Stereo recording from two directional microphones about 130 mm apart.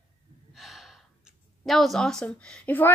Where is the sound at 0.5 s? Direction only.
Centre (ahead or behind).